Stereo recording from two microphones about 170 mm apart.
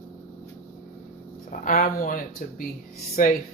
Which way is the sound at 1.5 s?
55° left (ahead or behind).